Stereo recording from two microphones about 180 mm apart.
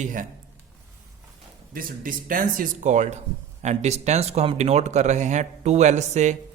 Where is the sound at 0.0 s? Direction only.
45° right (ahead or behind).